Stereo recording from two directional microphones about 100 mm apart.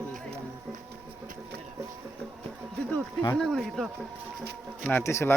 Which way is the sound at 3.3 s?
Centre (ahead or behind).